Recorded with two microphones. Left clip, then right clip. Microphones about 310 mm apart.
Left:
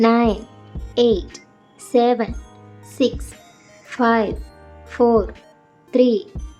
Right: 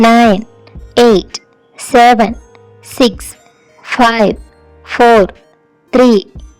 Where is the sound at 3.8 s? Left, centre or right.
Right.